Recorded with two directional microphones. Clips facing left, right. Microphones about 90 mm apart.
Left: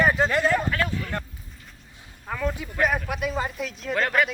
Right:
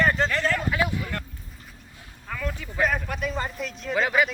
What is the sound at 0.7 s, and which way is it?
Vehicle, 15° right (ahead or behind).